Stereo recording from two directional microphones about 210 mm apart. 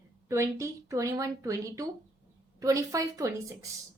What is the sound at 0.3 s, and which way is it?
A woman's voice, 15° right (ahead or behind).